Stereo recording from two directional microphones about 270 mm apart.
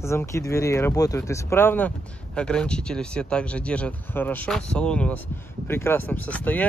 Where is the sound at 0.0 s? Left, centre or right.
Centre.